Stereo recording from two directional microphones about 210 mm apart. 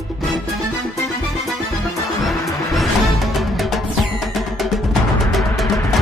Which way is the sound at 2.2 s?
Centre (ahead or behind).